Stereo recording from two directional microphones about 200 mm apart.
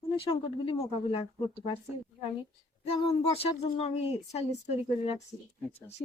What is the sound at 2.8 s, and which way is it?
A woman's voice, 30° left (ahead or behind).